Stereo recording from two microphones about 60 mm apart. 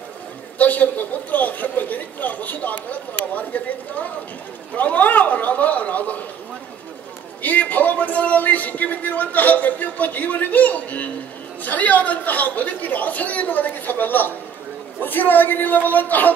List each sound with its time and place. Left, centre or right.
0.6 s a man's voice: left
4.7 s a man's voice: left
7.4 s a man's voice: left